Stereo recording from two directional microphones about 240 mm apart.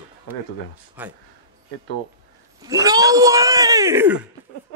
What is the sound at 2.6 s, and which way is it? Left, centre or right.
Speech, centre.